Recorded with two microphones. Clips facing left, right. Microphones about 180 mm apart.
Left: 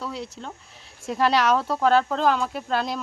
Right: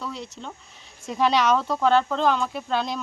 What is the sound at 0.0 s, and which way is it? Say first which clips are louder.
A woman's voice: left 1 dB; 5° left (ahead or behind).